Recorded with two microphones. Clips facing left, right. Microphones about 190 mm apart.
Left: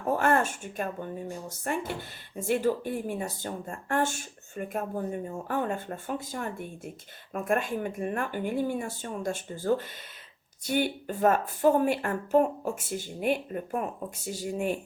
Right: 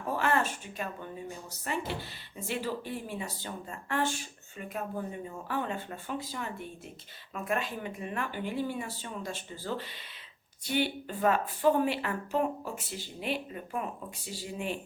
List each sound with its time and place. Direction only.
0.1 s speech: 50° left (ahead or behind)